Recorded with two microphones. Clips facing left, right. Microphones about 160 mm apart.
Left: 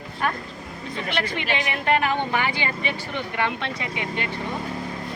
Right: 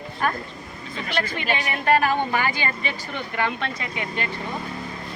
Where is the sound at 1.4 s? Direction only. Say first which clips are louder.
Even; 20° left (ahead or behind).